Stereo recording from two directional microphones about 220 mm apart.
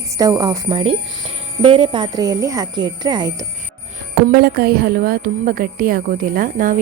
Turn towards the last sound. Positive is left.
turn(degrees=-40)  # may be behind; listen again after turning